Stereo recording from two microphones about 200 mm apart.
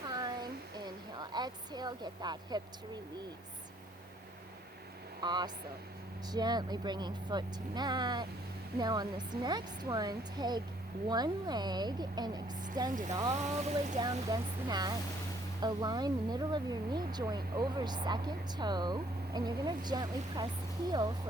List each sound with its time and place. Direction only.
0.1 s a sound: 20° right (ahead or behind)
5.2 s speech: 20° right (ahead or behind)
12.9 s speech: 40° right (ahead or behind)
14.0 s speech: 20° right (ahead or behind)